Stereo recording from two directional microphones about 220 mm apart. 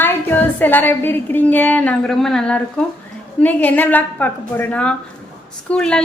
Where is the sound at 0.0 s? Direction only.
10° left (ahead or behind).